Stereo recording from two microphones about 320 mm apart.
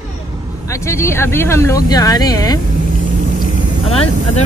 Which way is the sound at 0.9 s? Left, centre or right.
Centre.